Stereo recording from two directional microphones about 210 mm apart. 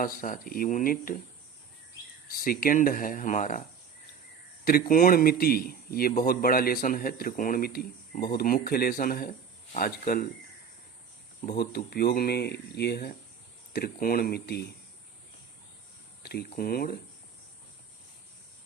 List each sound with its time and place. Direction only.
0.0 s speech: 40° left (ahead or behind)
2.4 s speech: 45° left (ahead or behind)
4.6 s speech: 45° left (ahead or behind)
11.4 s speech: 50° left (ahead or behind)
16.2 s speech: 50° left (ahead or behind)